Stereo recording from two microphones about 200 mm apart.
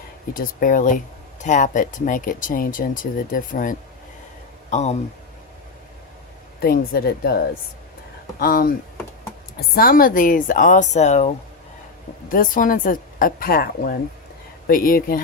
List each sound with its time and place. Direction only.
0.3 s speech: 45° left (ahead or behind)
6.6 s speech: 50° left (ahead or behind)
12.3 s speech: 45° left (ahead or behind)